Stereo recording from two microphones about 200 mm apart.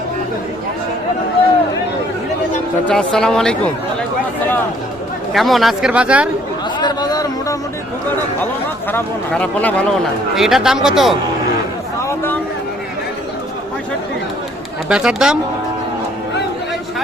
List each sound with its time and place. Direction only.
2.8 s speech: 5° left (ahead or behind)
5.3 s speech: centre (ahead or behind)
6.7 s a sound: 20° left (ahead or behind)
8.9 s speech: 10° left (ahead or behind)
12.0 s a sound: 10° left (ahead or behind)
14.8 s speech: 5° right (ahead or behind)